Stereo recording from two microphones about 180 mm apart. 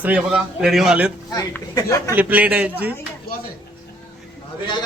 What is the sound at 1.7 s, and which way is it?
Speech, 15° left (ahead or behind).